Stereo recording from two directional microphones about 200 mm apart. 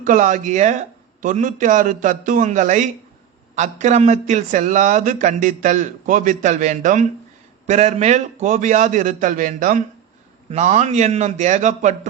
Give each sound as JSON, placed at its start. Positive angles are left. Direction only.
{"t": 0.0, "sound": "a man's voice", "side_deg": -40}